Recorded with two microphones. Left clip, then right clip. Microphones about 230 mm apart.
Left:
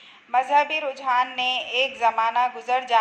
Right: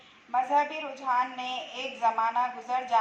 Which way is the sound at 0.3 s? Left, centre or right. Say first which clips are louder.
Left 6 dB; left.